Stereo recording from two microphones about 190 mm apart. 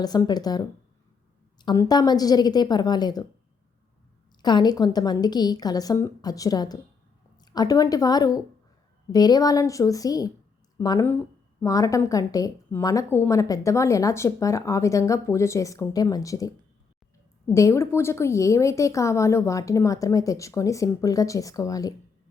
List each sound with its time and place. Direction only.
0.0 s a woman's voice: 20° left (ahead or behind)
4.4 s a woman's voice: 20° left (ahead or behind)